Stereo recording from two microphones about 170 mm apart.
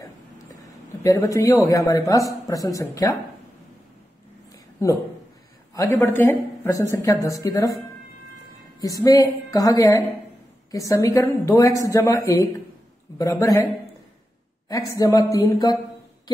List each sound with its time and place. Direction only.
0.6 s a woman's voice: 20° left (ahead or behind)
4.8 s speech: 20° left (ahead or behind)
8.8 s speech: 20° left (ahead or behind)
14.7 s speech: 20° left (ahead or behind)